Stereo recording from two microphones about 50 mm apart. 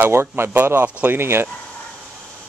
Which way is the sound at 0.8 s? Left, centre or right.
Right.